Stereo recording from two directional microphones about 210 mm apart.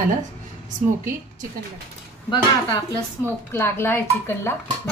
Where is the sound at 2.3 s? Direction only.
15° left (ahead or behind).